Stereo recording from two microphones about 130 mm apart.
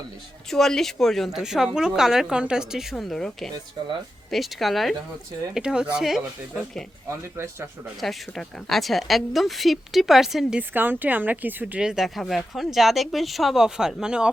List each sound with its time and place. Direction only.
0.5 s speech: 5° left (ahead or behind)
7.1 s speech: 20° right (ahead or behind)
8.0 s speech: centre (ahead or behind)
10.6 s speech: 15° right (ahead or behind)